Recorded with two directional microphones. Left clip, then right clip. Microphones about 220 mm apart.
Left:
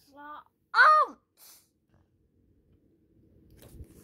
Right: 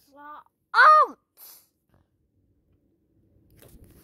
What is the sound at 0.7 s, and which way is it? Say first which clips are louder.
Sigh: right 5 dB; 40° right (ahead or behind).